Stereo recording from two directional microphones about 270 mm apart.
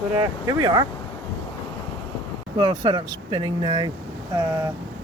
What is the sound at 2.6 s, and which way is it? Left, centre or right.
Speech, centre.